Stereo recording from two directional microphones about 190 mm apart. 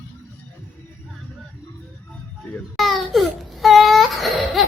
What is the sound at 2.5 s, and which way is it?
Speech, centre (ahead or behind).